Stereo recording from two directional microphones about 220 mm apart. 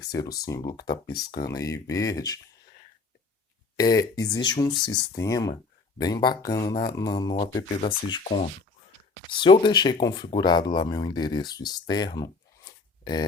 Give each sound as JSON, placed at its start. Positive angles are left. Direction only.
{"t": 0.4, "sound": "speech", "side_deg": 15}
{"t": 3.8, "sound": "speech", "side_deg": 15}